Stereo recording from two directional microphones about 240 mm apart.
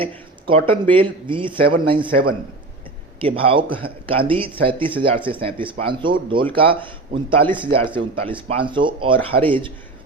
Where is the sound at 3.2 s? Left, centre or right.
Right.